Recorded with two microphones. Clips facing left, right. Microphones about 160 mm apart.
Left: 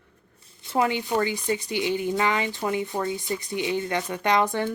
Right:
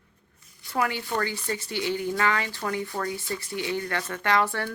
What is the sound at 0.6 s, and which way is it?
Speech, 20° left (ahead or behind).